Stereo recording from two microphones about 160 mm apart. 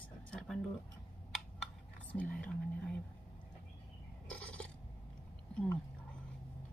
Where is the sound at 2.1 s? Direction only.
10° left (ahead or behind).